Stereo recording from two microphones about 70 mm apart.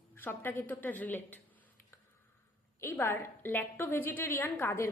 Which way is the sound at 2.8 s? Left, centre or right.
Left.